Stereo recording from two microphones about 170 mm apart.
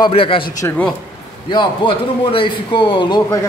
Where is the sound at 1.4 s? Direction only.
30° left (ahead or behind).